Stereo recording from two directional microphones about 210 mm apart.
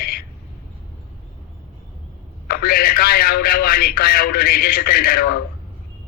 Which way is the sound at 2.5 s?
45° left (ahead or behind).